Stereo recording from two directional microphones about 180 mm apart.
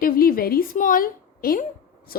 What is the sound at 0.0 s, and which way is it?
A woman's voice, 55° left (ahead or behind).